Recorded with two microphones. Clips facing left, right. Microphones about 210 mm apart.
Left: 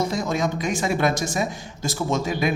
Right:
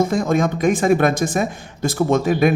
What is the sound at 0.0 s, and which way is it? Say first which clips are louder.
Speech: right 6 dB; 50° right (ahead or behind).